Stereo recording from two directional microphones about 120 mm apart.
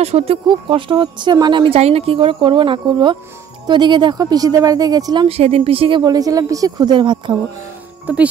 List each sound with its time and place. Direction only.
0.0 s speech: 60° right (ahead or behind)
0.5 s speech: 45° right (ahead or behind)
1.8 s speech: 55° right (ahead or behind); by 5.3 s 35° right (ahead or behind)
5.3 s speech: 55° right (ahead or behind); by 7.3 s 40° right (ahead or behind)
8.1 s speech: 15° right (ahead or behind)